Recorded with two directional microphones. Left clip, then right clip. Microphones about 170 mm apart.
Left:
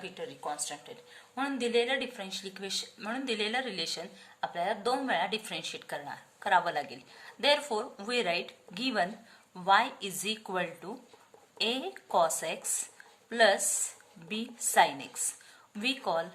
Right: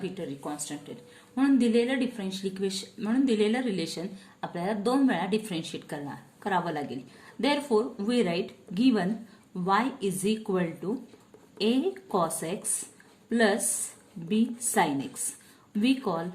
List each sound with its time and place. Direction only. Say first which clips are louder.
0.0 s a woman's voice: right 3 dB; 10° left (ahead or behind)